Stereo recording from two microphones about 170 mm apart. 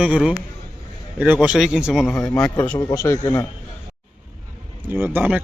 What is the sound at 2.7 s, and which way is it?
Speech, 15° left (ahead or behind).